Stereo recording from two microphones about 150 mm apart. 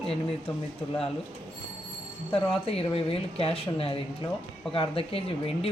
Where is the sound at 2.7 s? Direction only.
40° left (ahead or behind).